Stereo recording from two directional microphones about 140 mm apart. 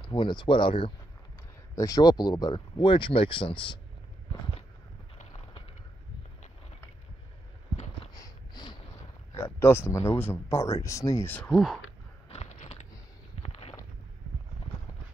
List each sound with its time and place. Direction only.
0.0 s speech: 35° left (ahead or behind)
1.8 s speech: 25° left (ahead or behind)
8.1 s a sound: 30° left (ahead or behind)
9.3 s speech: 20° left (ahead or behind)
11.5 s speech: centre (ahead or behind)
12.3 s biting: 45° left (ahead or behind)
13.4 s a sound: 45° left (ahead or behind)